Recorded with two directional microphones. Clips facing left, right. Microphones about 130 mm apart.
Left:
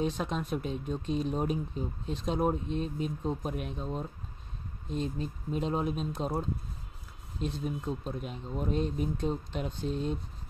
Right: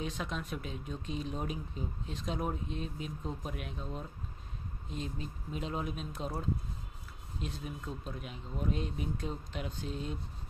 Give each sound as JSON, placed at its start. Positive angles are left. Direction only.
{"t": 0.0, "sound": "speech", "side_deg": 35}
{"t": 7.4, "sound": "speech", "side_deg": 35}